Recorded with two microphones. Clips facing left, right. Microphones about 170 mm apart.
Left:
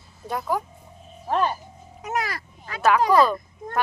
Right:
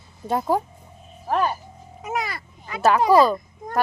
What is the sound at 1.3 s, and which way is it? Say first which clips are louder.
Speech: right 1 dB; 10° right (ahead or behind).